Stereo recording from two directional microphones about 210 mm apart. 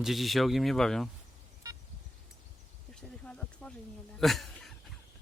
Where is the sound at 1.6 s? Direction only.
15° right (ahead or behind).